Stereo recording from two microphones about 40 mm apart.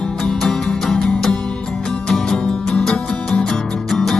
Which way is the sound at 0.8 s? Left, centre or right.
Centre.